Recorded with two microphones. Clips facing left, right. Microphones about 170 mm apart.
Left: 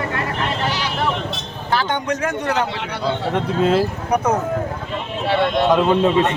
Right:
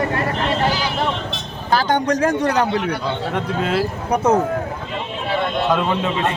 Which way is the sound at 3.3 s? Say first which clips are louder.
Left 4 dB; 35° left (ahead or behind).